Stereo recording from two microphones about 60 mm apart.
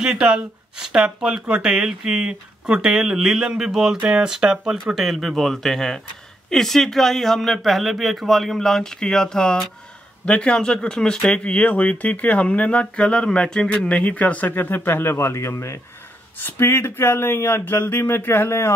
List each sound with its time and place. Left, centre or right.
0.0 s speech: centre
4.9 s speech: centre; by 15.8 s left
16.3 s speech: left